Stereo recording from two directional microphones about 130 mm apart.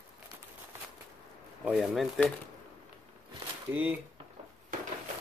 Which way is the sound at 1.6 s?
5° right (ahead or behind).